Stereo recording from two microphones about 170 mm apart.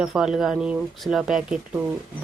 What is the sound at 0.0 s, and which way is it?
Speech, centre (ahead or behind).